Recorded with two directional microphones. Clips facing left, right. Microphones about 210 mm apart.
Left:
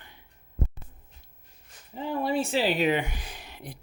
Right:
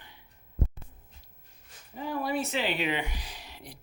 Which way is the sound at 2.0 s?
25° left (ahead or behind).